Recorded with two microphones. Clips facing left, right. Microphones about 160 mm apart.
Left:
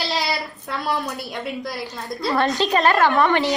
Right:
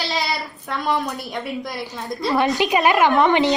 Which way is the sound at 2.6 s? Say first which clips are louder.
Even; 15° right (ahead or behind).